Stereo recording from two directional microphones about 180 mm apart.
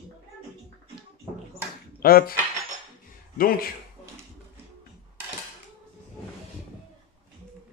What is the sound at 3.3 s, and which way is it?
Speech, 55° left (ahead or behind).